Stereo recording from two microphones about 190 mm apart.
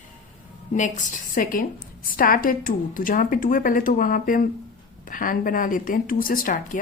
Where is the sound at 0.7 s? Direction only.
40° left (ahead or behind).